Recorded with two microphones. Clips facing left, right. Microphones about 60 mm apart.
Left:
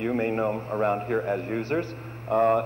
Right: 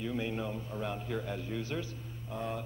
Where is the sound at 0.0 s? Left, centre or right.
Left.